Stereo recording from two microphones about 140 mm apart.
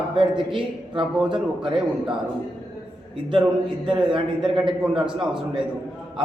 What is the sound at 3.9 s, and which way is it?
A man's voice, 35° right (ahead or behind).